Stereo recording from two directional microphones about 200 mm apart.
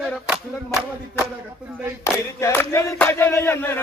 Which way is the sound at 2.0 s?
15° left (ahead or behind).